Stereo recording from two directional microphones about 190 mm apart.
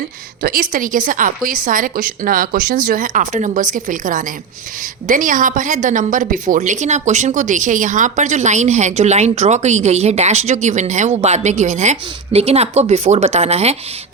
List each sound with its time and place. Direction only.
0.4 s a woman's voice: 50° right (ahead or behind)